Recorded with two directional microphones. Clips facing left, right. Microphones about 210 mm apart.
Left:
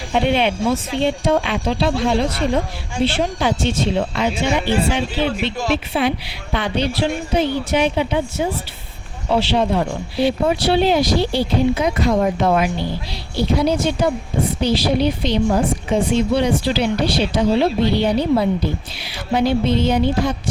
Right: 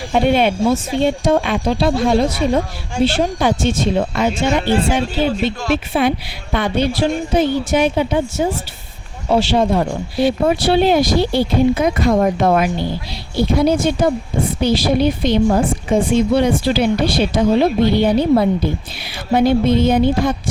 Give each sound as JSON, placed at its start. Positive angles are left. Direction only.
{"t": 0.1, "sound": "speech", "side_deg": -45}